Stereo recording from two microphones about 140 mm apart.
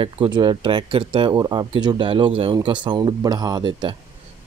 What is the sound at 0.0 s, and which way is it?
Speech, 35° right (ahead or behind).